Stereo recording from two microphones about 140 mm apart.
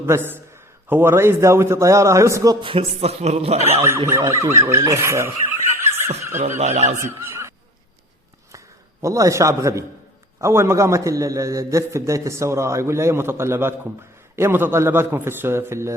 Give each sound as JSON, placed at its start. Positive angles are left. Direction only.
{"t": 0.0, "sound": "a man's voice", "side_deg": -15}
{"t": 2.6, "sound": "a man's voice", "side_deg": -45}
{"t": 3.8, "sound": "a man's voice", "side_deg": -20}
{"t": 6.6, "sound": "speech", "side_deg": -50}
{"t": 7.2, "sound": "neigh", "side_deg": -20}
{"t": 8.5, "sound": "a man's voice", "side_deg": -20}